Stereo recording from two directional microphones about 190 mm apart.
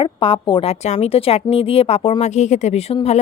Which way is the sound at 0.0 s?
25° left (ahead or behind).